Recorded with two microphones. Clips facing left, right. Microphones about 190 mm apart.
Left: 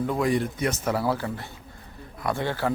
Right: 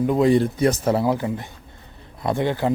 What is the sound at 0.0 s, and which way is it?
Speech, 20° right (ahead or behind).